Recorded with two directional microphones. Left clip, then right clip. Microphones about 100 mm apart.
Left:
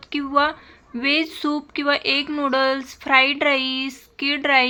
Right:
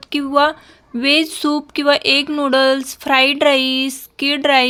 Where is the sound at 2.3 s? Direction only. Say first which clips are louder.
Right 6 dB; 45° right (ahead or behind).